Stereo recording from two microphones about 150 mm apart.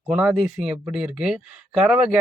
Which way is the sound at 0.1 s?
10° right (ahead or behind).